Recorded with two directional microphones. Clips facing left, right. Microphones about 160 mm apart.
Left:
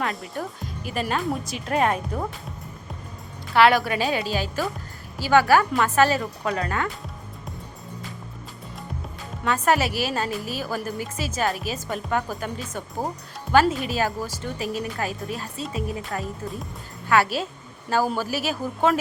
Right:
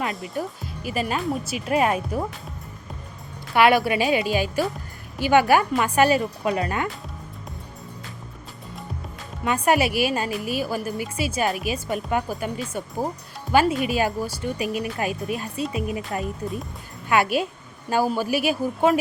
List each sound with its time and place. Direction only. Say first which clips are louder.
0.0 s speech: right 1 dB; centre (ahead or behind)
3.5 s a woman's voice: even; 15° right (ahead or behind)
9.4 s a woman's voice: right 1 dB; 10° right (ahead or behind)